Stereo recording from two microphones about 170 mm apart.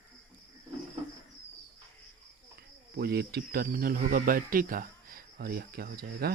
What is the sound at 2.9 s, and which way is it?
Speech, 70° right (ahead or behind).